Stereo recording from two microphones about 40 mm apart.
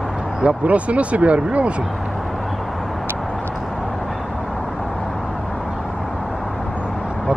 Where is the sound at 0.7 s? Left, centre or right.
Right.